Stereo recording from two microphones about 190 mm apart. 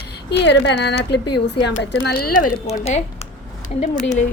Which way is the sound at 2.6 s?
35° left (ahead or behind).